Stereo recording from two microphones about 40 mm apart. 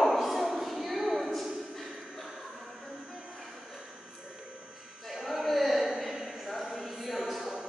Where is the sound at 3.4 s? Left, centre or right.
Centre.